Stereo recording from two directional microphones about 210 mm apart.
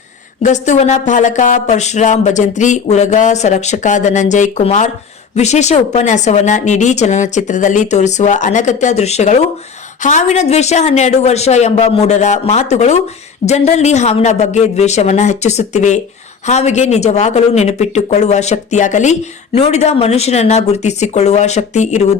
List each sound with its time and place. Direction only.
0.4 s a woman's voice: 35° left (ahead or behind)